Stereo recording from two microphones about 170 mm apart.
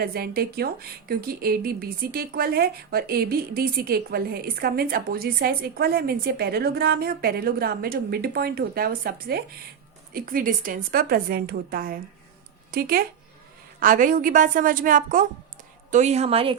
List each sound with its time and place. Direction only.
0.0 s a woman's voice: 65° right (ahead or behind)
15.9 s a woman's voice: 45° right (ahead or behind)